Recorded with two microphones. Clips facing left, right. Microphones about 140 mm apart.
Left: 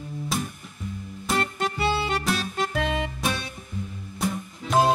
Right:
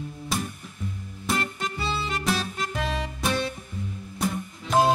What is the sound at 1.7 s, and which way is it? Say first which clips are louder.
Music: left 5 dB; 65° left (ahead or behind).